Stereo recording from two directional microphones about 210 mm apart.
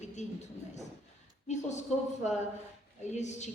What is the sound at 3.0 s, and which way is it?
Speech, 35° left (ahead or behind).